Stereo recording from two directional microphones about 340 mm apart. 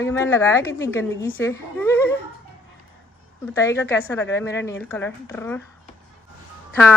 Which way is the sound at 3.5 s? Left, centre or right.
Centre.